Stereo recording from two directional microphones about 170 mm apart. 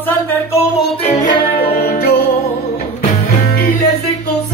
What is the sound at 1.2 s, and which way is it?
Music, 60° left (ahead or behind).